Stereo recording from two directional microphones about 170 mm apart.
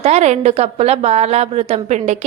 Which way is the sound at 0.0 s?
40° right (ahead or behind).